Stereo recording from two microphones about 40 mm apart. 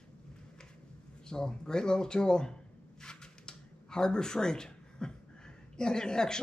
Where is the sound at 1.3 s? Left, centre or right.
Centre.